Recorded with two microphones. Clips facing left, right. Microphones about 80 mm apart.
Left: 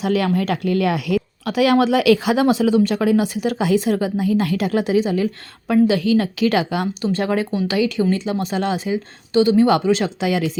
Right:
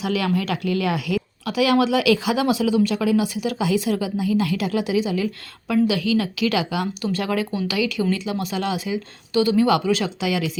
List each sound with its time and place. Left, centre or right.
0.0 s speech: left
7.0 s speech: left